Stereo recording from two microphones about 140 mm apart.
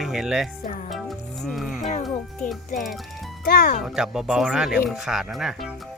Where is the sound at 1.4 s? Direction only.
Centre (ahead or behind).